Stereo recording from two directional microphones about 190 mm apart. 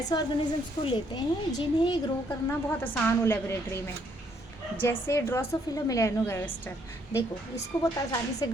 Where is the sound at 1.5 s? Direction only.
20° left (ahead or behind).